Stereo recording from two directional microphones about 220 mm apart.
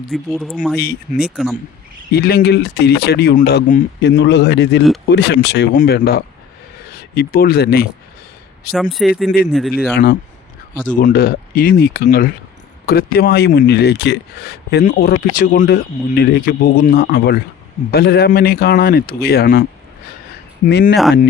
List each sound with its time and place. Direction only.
0.1 s speech: centre (ahead or behind)
0.8 s speech: 45° left (ahead or behind)
8.7 s speech: centre (ahead or behind)
9.9 s speech: 40° left (ahead or behind)
20.7 s speech: 50° left (ahead or behind)
20.9 s speech: centre (ahead or behind)